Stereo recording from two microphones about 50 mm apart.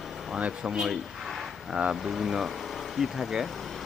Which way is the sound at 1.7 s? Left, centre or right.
Centre.